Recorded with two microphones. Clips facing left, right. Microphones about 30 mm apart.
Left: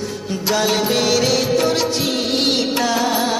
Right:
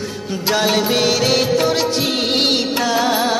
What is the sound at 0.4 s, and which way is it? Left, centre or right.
Music, centre.